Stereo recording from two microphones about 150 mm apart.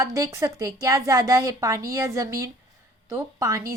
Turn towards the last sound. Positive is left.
turn(degrees=-25)  # may be behind; listen again after turning